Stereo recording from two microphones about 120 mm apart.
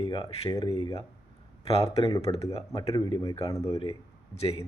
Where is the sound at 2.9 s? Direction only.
40° left (ahead or behind).